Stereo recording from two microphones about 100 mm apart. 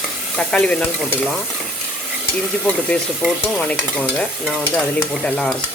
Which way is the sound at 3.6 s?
15° left (ahead or behind).